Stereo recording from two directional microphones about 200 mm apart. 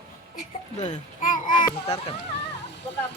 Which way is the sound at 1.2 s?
40° left (ahead or behind).